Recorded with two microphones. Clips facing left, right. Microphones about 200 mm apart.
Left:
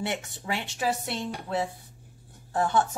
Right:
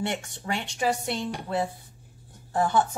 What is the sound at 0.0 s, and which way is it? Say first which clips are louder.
A woman's voice: right 1 dB; 5° left (ahead or behind).